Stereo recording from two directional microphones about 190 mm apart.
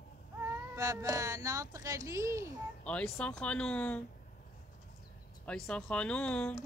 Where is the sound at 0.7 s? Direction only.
15° right (ahead or behind).